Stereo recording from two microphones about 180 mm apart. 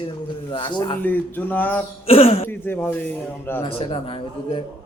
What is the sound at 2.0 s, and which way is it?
Speech, 35° left (ahead or behind).